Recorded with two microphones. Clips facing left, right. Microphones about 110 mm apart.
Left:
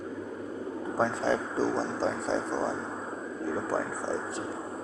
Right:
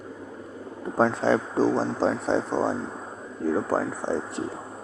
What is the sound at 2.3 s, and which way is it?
Speech, 55° right (ahead or behind).